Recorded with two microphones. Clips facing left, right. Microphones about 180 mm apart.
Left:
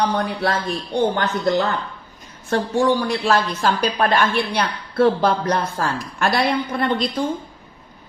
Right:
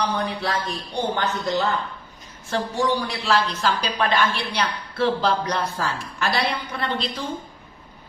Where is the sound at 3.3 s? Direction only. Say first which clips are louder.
Left 1 dB; 50° left (ahead or behind).